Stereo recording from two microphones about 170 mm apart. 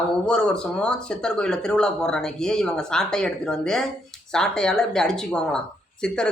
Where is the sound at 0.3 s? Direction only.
5° left (ahead or behind).